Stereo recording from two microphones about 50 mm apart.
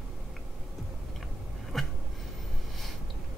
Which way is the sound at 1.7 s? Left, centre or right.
Centre.